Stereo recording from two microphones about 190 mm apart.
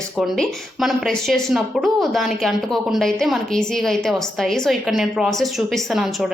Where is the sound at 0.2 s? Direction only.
Centre (ahead or behind).